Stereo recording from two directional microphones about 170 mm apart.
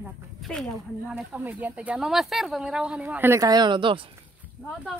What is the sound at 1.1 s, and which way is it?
Speech, 10° right (ahead or behind).